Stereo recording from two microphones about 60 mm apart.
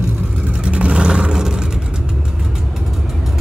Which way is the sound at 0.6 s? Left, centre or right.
Centre.